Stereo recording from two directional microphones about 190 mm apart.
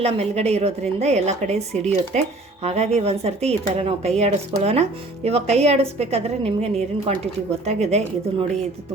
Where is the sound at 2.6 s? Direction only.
35° right (ahead or behind).